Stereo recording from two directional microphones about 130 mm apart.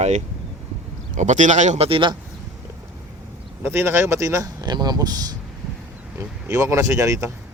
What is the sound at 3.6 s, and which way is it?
Speech, 20° right (ahead or behind).